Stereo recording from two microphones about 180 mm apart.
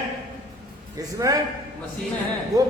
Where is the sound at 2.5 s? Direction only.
20° right (ahead or behind).